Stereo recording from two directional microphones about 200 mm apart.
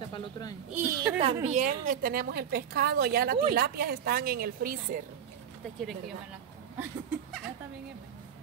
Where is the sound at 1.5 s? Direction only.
40° right (ahead or behind).